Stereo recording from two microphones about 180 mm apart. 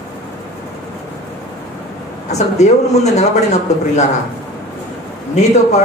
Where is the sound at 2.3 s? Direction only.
40° left (ahead or behind).